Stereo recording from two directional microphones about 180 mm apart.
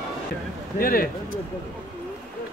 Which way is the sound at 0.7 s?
55° left (ahead or behind).